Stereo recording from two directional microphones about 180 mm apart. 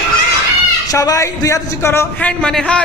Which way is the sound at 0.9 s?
20° left (ahead or behind).